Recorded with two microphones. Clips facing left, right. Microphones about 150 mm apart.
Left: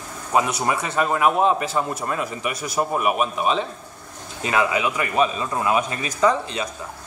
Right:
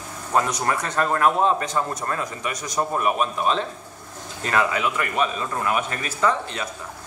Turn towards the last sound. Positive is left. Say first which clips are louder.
# left 3 dB
turn(degrees=15)  # may be behind; listen again after turning